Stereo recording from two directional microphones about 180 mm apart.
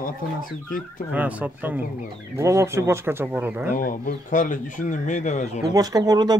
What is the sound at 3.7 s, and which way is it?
Speech, 50° left (ahead or behind).